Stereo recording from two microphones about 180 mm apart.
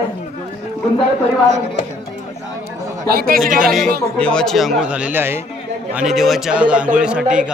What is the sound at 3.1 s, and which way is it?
Speech, 55° right (ahead or behind).